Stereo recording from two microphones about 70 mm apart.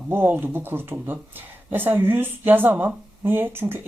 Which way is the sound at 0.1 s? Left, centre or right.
Right.